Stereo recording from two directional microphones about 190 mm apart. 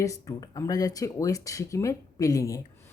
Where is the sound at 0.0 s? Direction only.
20° left (ahead or behind).